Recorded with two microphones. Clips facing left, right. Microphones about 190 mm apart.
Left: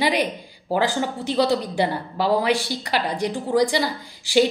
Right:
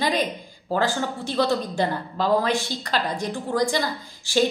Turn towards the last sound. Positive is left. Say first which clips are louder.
# left 4 dB
turn(degrees=15)  # may be behind; listen again after turning